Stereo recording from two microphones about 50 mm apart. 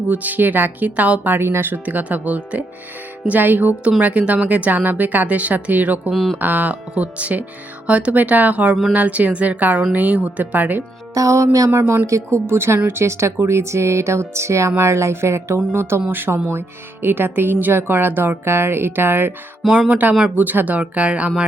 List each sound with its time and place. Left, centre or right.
0.1 s speech: right
1.3 s speech: right
1.8 s speech: right
4.0 s speech: right
11.7 s speech: right
12.0 s speech: right
12.5 s speech: right
16.0 s speech: right
16.3 s speech: right
19.9 s speech: right